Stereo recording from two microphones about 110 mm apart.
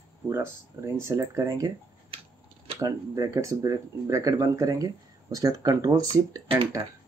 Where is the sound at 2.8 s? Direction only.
30° right (ahead or behind).